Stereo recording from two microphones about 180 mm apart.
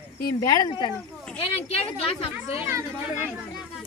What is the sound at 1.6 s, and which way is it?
A woman's voice, 30° left (ahead or behind).